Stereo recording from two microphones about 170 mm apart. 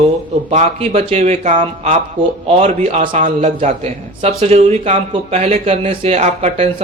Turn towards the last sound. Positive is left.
turn(degrees=-40)  # may be behind; listen again after turning